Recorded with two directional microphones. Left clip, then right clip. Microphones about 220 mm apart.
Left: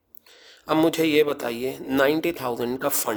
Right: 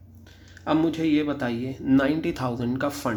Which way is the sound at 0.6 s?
50° left (ahead or behind).